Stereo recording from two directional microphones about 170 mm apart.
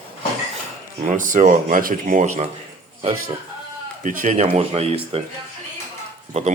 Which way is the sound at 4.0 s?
50° right (ahead or behind).